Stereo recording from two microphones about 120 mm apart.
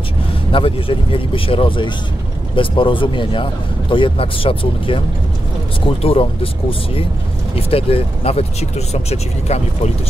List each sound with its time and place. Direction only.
0.5 s speech: 50° left (ahead or behind); by 9.6 s 65° left (ahead or behind)